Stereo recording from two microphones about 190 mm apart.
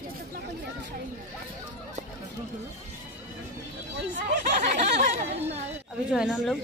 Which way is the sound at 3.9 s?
65° right (ahead or behind).